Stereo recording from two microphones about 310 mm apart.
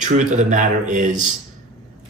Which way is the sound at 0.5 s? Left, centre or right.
Right.